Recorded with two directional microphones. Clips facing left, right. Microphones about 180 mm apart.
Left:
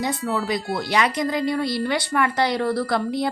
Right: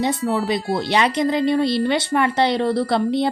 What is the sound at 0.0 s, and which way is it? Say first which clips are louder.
Speech: right 4 dB; 25° right (ahead or behind).